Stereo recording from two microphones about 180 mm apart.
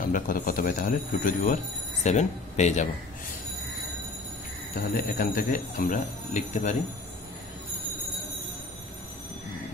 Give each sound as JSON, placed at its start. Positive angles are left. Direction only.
{"t": 0.1, "sound": "speech", "side_deg": 50}
{"t": 4.9, "sound": "speech", "side_deg": 50}